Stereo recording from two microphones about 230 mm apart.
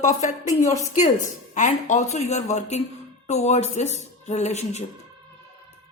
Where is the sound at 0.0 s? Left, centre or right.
Left.